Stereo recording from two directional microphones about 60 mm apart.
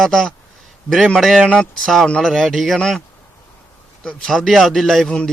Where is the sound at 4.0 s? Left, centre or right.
Centre.